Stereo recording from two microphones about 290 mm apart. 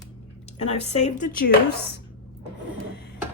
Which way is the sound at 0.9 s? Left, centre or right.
Left.